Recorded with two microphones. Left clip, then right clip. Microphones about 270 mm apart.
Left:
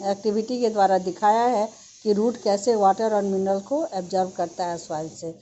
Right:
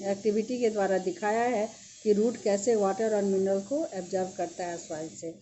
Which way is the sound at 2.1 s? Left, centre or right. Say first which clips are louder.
Left 4 dB; left.